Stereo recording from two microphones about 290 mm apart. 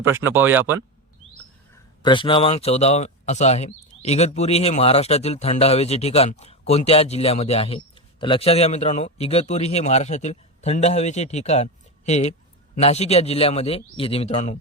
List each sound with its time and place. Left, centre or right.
0.0 s speech: centre
2.0 s speech: centre